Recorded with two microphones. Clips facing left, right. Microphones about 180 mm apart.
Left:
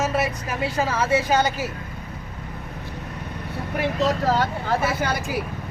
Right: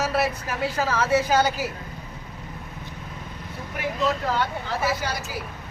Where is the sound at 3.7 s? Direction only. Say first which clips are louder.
Left 3 dB; 40° left (ahead or behind).